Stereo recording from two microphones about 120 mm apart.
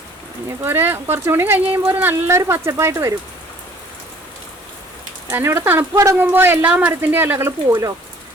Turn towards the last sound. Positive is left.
turn(degrees=-25)  # may be behind; listen again after turning